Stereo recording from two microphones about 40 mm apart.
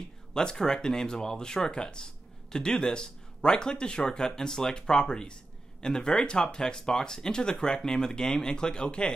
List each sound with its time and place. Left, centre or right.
0.3 s speech: centre